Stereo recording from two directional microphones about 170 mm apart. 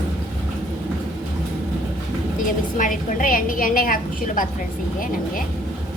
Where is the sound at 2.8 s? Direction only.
55° left (ahead or behind).